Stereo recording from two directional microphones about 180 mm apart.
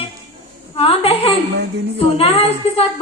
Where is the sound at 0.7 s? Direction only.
30° left (ahead or behind).